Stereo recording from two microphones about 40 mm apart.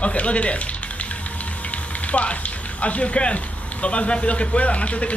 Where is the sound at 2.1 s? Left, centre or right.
Left.